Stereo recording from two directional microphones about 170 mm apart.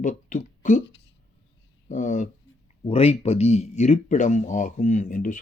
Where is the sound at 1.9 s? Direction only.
45° left (ahead or behind).